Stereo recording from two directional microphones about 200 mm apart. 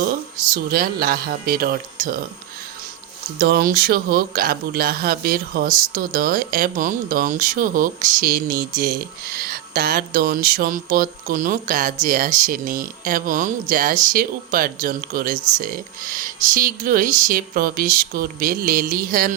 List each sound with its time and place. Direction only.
0.0 s speech: 45° right (ahead or behind)
3.3 s speech: 50° right (ahead or behind)